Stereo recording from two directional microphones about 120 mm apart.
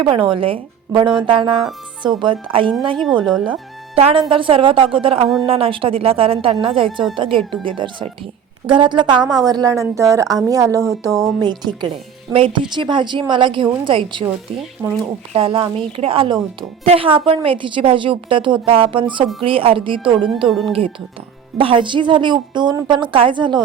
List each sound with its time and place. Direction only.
0.0 s a woman's voice: 45° right (ahead or behind)
3.0 s speech: 5° right (ahead or behind)
3.9 s a woman's voice: 50° right (ahead or behind)
14.8 s speech: 15° right (ahead or behind)
15.3 s a woman's voice: 50° right (ahead or behind)
20.5 s speech: centre (ahead or behind)
21.6 s speech: 45° right (ahead or behind)